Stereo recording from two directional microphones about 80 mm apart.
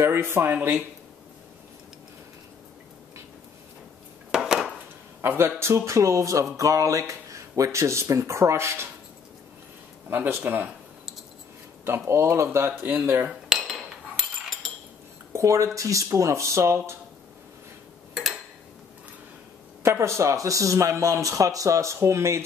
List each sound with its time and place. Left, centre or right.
0.0 s speech: right
0.6 s speech: centre
4.4 s a sound: centre
5.2 s speech: right
10.0 s speech: right
12.1 s speech: right
13.3 s cutlery: centre
15.3 s speech: right
18.1 s tick-tock: centre
19.8 s speech: right